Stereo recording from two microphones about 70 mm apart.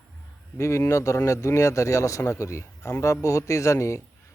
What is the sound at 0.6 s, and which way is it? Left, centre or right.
Speech, left.